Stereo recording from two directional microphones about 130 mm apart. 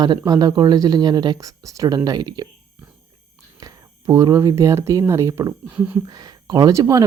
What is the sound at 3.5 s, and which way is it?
Speech, 30° right (ahead or behind).